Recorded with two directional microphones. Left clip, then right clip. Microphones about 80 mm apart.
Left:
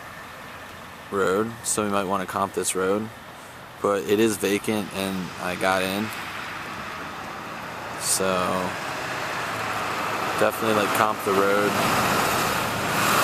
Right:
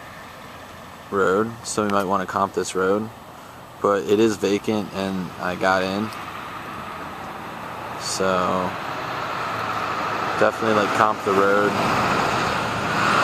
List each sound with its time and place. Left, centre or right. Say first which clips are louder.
1.1 s speech: right 3 dB; centre
5.9 s speech: right 1 dB; left
8.0 s speech: right 3 dB; centre
8.6 s vehicle: right 2 dB; left
10.4 s speech: right 3 dB; centre
11.2 s speech: right 3 dB; centre
11.6 s vehicle: right 2 dB; left